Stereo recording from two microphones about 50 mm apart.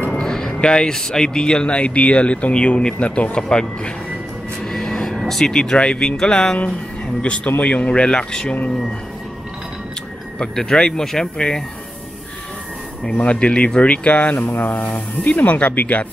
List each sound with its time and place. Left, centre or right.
0.1 s a sound: centre
0.6 s speech: centre
4.6 s vehicle: centre
5.2 s speech: centre
10.4 s speech: centre
13.0 s speech: left